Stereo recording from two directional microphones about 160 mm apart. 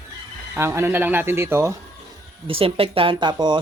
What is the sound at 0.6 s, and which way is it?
Speech, 15° right (ahead or behind).